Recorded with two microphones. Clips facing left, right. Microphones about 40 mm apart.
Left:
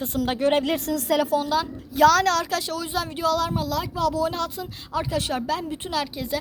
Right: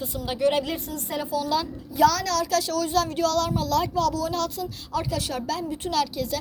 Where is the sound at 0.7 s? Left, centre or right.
Left.